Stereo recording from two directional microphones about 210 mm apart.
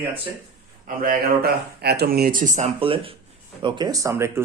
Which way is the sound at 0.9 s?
40° right (ahead or behind).